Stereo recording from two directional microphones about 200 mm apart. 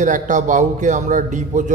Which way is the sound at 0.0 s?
40° right (ahead or behind).